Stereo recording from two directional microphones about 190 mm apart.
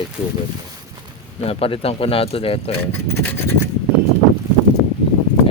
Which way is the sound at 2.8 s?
10° left (ahead or behind).